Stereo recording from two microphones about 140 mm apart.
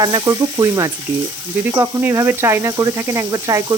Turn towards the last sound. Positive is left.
turn(degrees=-25)  # may be behind; listen again after turning